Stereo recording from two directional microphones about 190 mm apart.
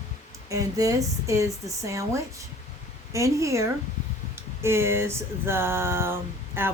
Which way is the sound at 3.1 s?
15° right (ahead or behind).